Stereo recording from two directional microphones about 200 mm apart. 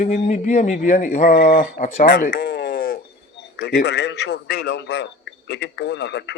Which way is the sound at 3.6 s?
55° left (ahead or behind).